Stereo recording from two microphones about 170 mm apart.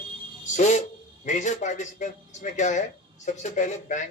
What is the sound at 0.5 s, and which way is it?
Speech, 45° left (ahead or behind).